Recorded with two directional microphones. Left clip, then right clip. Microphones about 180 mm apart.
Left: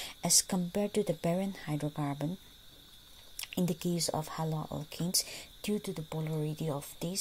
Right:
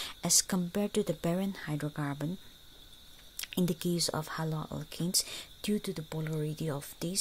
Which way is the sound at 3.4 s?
10° right (ahead or behind).